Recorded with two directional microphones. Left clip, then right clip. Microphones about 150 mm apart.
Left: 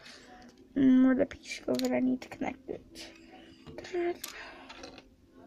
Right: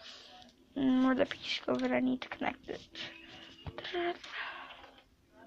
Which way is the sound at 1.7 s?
10° left (ahead or behind).